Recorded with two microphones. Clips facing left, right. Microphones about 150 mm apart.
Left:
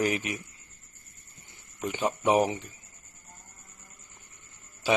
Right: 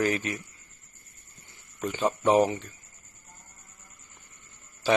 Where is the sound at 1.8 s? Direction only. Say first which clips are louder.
Right 2 dB; 15° left (ahead or behind).